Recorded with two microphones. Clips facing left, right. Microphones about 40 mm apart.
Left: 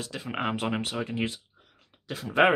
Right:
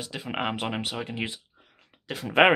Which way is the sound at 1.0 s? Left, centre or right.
Right.